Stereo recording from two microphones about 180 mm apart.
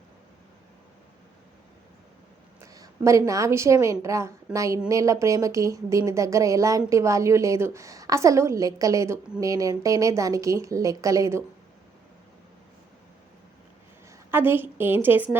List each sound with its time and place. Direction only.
2.7 s speech: 20° right (ahead or behind)
14.3 s speech: 10° right (ahead or behind)